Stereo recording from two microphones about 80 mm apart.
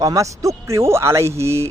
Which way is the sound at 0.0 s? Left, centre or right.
Right.